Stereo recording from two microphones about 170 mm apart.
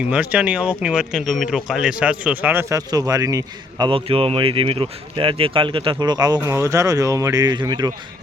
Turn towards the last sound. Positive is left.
turn(degrees=-25)  # may be behind; listen again after turning